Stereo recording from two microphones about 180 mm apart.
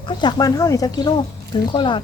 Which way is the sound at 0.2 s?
25° left (ahead or behind).